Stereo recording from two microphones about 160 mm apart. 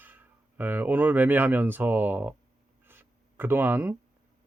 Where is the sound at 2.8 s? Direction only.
15° right (ahead or behind).